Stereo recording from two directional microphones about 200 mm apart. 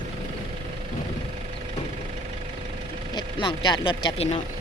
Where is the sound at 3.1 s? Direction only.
25° left (ahead or behind).